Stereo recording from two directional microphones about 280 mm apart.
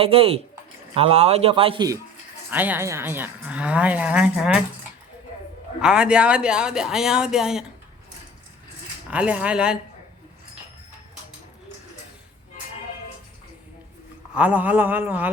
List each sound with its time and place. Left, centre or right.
0.0 s speech: centre
5.8 s speech: centre
9.0 s speech: centre
14.3 s speech: centre